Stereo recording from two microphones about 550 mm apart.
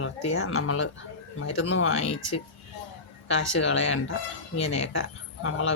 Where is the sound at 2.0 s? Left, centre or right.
Centre.